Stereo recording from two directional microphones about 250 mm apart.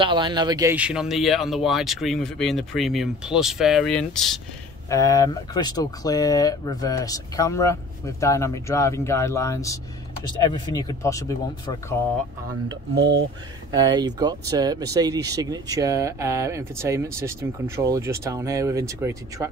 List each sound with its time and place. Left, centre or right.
0.0 s speech: centre
4.8 s speech: centre
13.7 s speech: centre